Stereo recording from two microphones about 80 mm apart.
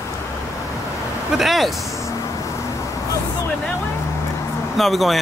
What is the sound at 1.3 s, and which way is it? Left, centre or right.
Speech, centre.